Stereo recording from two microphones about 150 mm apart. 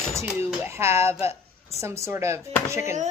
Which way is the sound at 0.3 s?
15° right (ahead or behind).